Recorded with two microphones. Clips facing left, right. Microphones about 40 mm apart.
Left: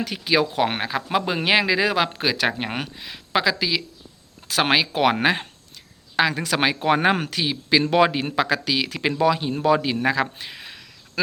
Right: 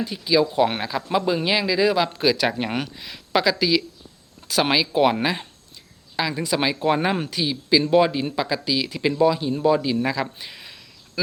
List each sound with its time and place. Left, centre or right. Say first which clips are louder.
0.0 s speech: right 1 dB; left
0.7 s a man's voice: even; left
2.1 s speech: right 2 dB; left
2.5 s speech: right 1 dB; centre
4.4 s a man's voice: left 1 dB; left
6.1 s speech: left 3 dB; left
6.6 s a man's voice: left 2 dB; left
7.5 s a man's voice: even; left
7.9 s speech: even; left
9.2 s speech: right 1 dB; left
9.7 s speech: left 1 dB; left